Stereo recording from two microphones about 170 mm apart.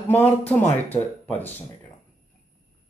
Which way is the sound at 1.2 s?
10° left (ahead or behind).